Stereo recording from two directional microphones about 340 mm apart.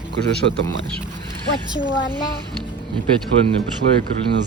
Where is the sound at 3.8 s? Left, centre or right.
Right.